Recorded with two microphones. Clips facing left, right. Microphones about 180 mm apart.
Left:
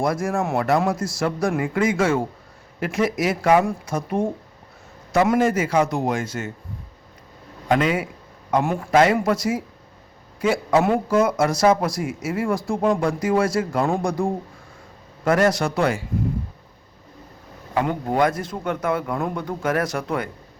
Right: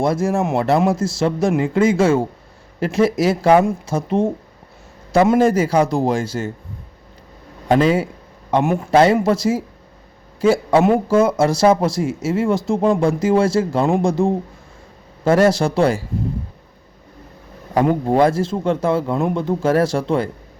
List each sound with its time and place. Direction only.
0.0 s a man's voice: 25° right (ahead or behind)
7.7 s speech: 30° right (ahead or behind)
17.7 s speech: 30° right (ahead or behind)